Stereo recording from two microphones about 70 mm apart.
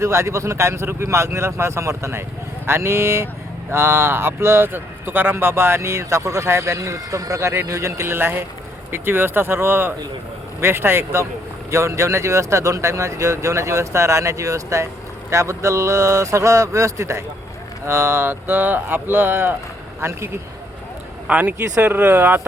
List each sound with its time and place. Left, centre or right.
0.0 s a man's voice: right
21.2 s speech: right